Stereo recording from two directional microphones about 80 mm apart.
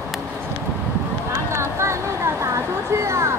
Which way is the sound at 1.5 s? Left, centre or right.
Right.